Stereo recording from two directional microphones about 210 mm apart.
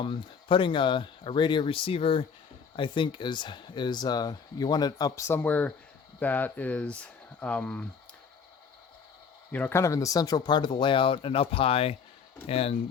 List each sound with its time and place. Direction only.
0.0 s speech: 25° left (ahead or behind); by 7.9 s 5° left (ahead or behind)
9.5 s speech: 10° left (ahead or behind); by 12.7 s 30° left (ahead or behind)